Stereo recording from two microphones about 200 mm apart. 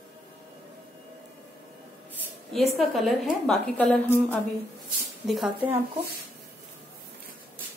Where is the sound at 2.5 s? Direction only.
Centre (ahead or behind).